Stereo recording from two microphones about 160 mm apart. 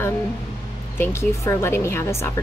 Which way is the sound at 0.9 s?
15° left (ahead or behind).